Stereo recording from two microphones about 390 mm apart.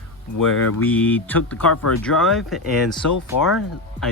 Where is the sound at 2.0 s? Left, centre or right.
Centre.